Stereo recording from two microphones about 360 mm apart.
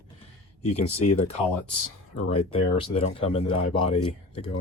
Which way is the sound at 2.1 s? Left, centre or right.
Centre.